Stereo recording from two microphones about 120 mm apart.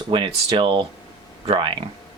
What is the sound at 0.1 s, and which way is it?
Speech, 45° right (ahead or behind).